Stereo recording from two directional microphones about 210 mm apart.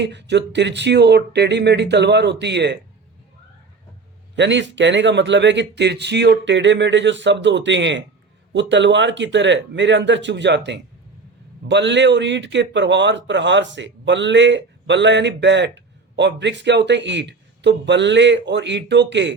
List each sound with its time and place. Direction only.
0.0 s a man's voice: 55° right (ahead or behind)
4.4 s a man's voice: 60° right (ahead or behind)